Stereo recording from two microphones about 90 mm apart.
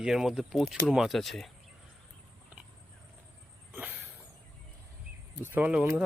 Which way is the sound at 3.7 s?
20° right (ahead or behind).